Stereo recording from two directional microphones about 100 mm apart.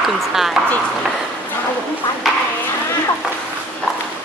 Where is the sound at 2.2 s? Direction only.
Centre (ahead or behind).